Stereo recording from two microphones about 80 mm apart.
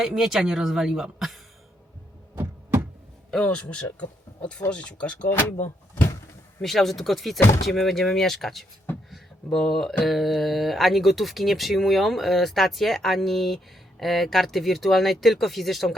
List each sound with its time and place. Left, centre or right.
0.0 s mantra: centre
2.3 s knock: right
3.3 s speech: centre
5.3 s speech: left
6.6 s mantra: centre
7.3 s speech: left
7.6 s mantra: centre